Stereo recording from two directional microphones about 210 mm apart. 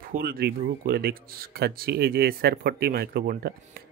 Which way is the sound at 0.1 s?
45° right (ahead or behind).